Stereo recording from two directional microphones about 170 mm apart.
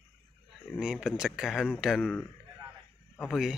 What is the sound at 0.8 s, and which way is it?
A man's voice, 5° right (ahead or behind).